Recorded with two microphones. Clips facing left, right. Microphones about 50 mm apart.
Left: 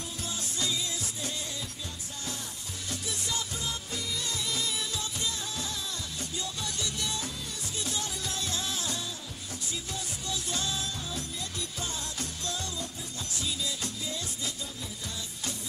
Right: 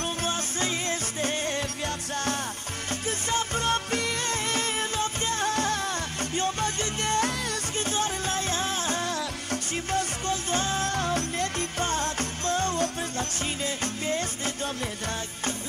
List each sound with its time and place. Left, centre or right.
0.0 s music: right
2.9 s music: right
9.0 s music: right